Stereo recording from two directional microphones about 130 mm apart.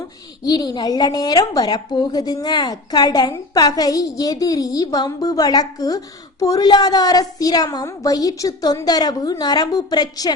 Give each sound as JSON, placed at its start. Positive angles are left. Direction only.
{"t": 0.4, "sound": "a woman's voice", "side_deg": 30}